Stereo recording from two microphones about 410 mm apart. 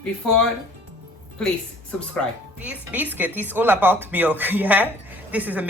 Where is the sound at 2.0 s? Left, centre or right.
Centre.